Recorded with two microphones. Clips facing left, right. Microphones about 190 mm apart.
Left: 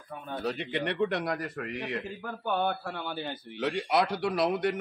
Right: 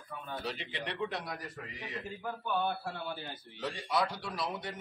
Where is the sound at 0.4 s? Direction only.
50° left (ahead or behind).